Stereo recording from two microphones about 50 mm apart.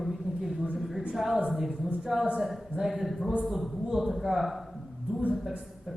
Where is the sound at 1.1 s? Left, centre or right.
Centre.